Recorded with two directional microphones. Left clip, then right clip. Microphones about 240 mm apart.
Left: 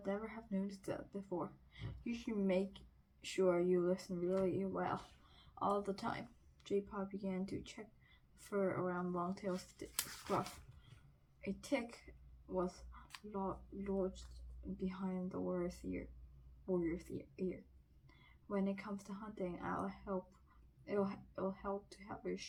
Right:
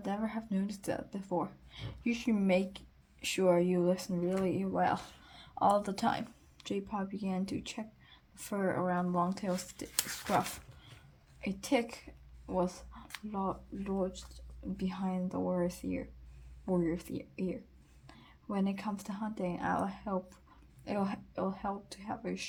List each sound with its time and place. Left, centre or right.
0.0 s speech: right
11.3 s a woman's voice: right